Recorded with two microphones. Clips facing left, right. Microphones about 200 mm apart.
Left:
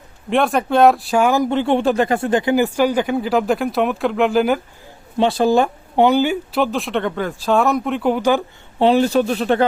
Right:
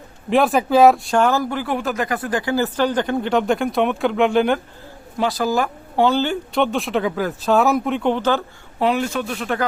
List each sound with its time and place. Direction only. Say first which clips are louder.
0.3 s speech: right 1 dB; centre (ahead or behind)
5.1 s speech: left 5 dB; 25° left (ahead or behind)
8.8 s speech: left 6 dB; 30° left (ahead or behind)